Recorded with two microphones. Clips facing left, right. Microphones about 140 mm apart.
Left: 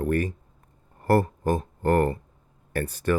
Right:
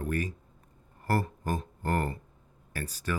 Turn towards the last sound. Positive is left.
turn(degrees=55)  # may be behind; listen again after turning